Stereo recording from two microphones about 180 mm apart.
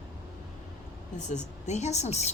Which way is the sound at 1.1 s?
40° left (ahead or behind).